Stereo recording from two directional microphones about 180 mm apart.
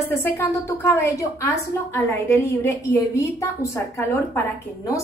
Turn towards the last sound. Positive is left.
turn(degrees=15)  # may be behind; listen again after turning